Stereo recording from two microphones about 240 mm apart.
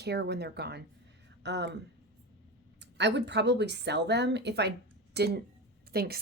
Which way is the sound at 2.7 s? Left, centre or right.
Right.